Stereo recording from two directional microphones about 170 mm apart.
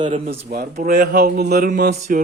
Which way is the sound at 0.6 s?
45° right (ahead or behind).